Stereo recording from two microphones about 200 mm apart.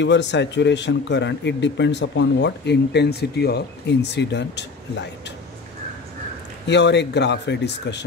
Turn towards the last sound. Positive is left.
turn(degrees=60)  # may be behind; listen again after turning